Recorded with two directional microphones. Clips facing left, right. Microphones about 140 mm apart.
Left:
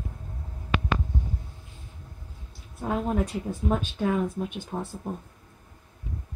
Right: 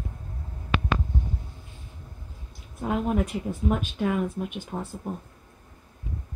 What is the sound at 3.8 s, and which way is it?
Speech, 10° right (ahead or behind).